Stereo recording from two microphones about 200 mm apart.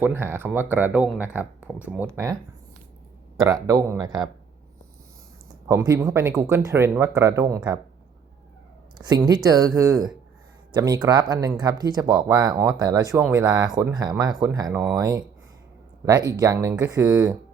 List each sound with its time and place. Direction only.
0.0 s speech: 10° right (ahead or behind)
3.4 s speech: 20° right (ahead or behind)
5.6 s speech: 15° right (ahead or behind)
9.0 s speech: 20° right (ahead or behind)